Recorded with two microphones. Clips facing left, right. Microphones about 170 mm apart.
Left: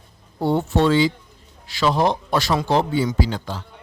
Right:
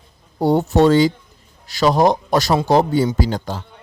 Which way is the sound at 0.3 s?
40° right (ahead or behind).